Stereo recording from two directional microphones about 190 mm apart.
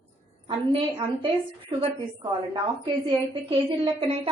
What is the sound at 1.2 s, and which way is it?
A woman's voice, 25° right (ahead or behind).